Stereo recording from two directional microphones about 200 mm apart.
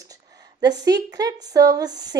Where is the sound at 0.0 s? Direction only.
20° right (ahead or behind).